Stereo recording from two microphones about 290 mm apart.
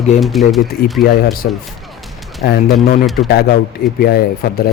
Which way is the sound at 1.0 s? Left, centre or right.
Left.